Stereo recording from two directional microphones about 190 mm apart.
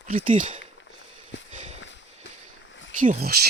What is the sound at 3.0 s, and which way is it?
Speech, 50° right (ahead or behind).